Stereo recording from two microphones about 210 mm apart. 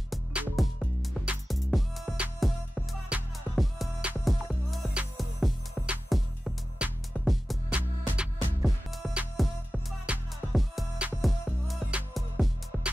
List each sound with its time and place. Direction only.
0.1 s music: 5° right (ahead or behind)